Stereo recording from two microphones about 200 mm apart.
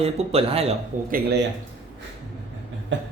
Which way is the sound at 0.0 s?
30° right (ahead or behind).